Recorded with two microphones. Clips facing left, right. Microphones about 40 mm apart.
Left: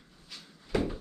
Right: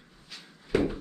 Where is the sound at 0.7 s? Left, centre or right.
Right.